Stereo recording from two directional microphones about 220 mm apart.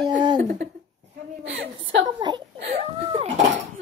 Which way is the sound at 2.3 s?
20° right (ahead or behind).